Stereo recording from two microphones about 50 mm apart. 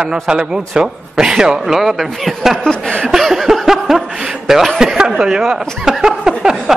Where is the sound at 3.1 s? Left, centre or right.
Centre.